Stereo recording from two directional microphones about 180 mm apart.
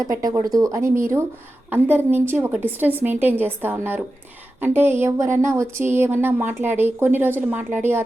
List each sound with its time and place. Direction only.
0.0 s speech: 20° right (ahead or behind)